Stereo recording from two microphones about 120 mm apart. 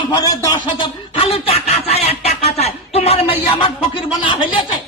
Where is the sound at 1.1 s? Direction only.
55° left (ahead or behind).